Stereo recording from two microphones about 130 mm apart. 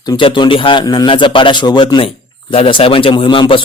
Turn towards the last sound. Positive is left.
turn(degrees=40)  # may be behind; listen again after turning